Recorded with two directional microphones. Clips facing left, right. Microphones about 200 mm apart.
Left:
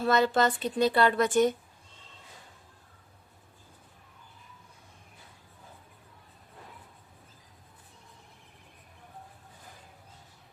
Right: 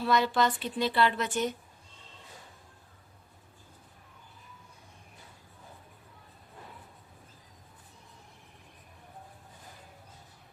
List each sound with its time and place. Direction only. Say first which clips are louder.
0.0 s speech: left 2 dB; 45° left (ahead or behind)